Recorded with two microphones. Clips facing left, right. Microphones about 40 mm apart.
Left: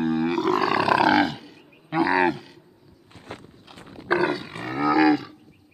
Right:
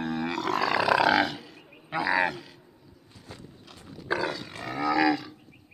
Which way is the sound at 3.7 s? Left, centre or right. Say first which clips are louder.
Left 5 dB; left.